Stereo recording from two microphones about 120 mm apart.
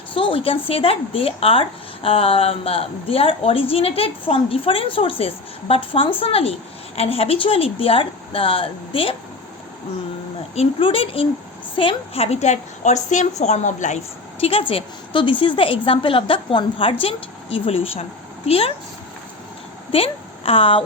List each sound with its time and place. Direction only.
0.1 s speech: 45° left (ahead or behind)
10.5 s a woman's voice: 55° left (ahead or behind); by 14.0 s 90° left
14.4 s speech: 50° left (ahead or behind)
19.9 s a woman's voice: 50° left (ahead or behind)